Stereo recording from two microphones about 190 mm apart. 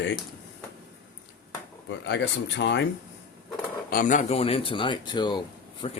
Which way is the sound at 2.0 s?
70° left (ahead or behind).